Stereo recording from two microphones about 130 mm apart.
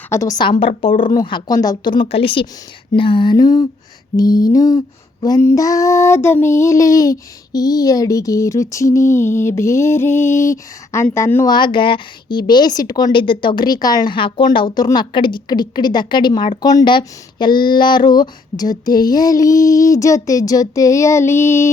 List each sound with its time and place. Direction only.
0.1 s a woman's voice: 25° left (ahead or behind)
11.4 s a woman's voice: 35° left (ahead or behind); by 21.7 s 20° left (ahead or behind)